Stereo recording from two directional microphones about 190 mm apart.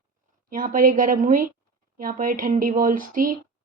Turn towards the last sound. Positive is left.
turn(degrees=-45)  # may be behind; listen again after turning